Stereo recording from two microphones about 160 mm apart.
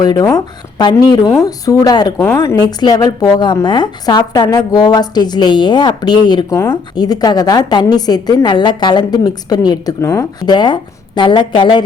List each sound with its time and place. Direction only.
0.0 s a woman's voice: 25° left (ahead or behind)